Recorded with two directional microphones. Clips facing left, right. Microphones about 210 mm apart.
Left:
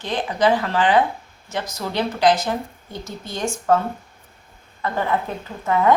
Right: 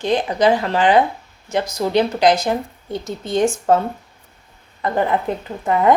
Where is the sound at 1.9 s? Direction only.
15° right (ahead or behind).